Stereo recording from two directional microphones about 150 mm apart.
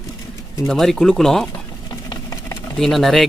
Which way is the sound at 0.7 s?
Centre (ahead or behind).